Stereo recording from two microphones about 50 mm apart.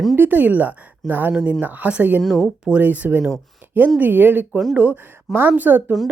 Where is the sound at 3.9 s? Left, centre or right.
Right.